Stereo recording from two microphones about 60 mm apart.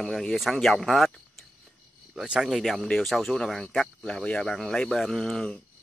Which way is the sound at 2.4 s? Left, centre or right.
Centre.